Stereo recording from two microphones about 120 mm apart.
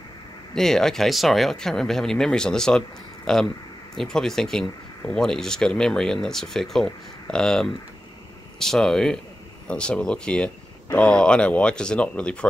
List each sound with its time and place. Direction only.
0.6 s speech: 5° left (ahead or behind)